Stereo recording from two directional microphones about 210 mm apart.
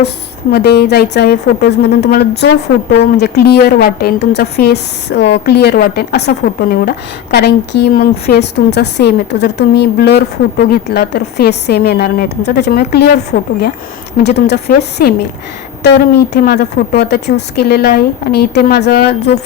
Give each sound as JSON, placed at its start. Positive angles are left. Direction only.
{"t": 0.5, "sound": "a woman's voice", "side_deg": 50}